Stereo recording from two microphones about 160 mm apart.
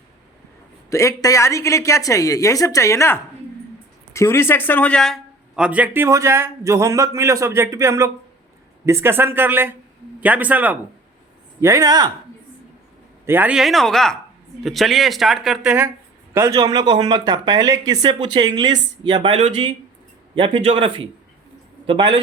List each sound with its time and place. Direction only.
0.9 s a woman's voice: 20° left (ahead or behind); by 10.8 s 10° right (ahead or behind)
11.6 s speech: 20° right (ahead or behind)
13.2 s a man's voice: 10° right (ahead or behind)
16.6 s a man's voice: 25° right (ahead or behind)